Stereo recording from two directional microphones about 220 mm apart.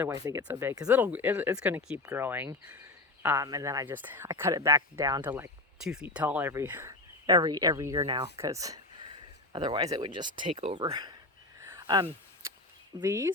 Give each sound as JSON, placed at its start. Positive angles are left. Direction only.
{"t": 0.0, "sound": "speech", "side_deg": -15}
{"t": 11.6, "sound": "a sound", "side_deg": -15}
{"t": 13.0, "sound": "speech", "side_deg": -15}